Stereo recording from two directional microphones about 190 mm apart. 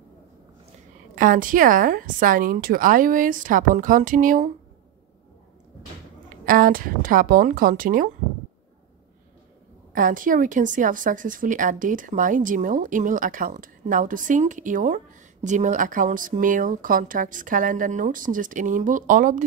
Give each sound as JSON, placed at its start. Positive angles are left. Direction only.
{"t": 1.1, "sound": "a woman's voice", "side_deg": -45}
{"t": 6.2, "sound": "a woman's voice", "side_deg": -45}
{"t": 9.9, "sound": "a woman's voice", "side_deg": -45}